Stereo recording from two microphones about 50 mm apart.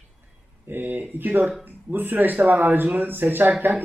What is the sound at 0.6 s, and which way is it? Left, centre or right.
Speech, right.